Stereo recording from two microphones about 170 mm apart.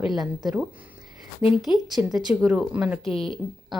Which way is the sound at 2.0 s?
20° right (ahead or behind).